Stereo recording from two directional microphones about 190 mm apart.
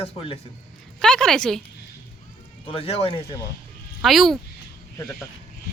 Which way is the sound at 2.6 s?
30° left (ahead or behind).